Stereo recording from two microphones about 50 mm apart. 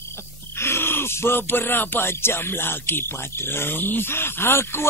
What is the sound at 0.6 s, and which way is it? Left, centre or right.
Speech, left.